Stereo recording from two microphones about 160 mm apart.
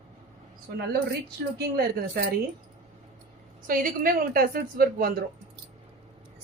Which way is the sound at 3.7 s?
60° right (ahead or behind).